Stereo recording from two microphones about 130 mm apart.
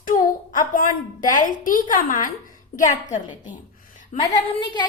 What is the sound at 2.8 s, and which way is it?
A woman's voice, 80° left.